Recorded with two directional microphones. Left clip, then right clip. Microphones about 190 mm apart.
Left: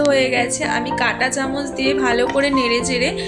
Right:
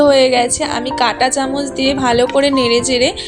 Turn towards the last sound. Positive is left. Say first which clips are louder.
# right 5 dB
turn(degrees=-20)  # may be behind; listen again after turning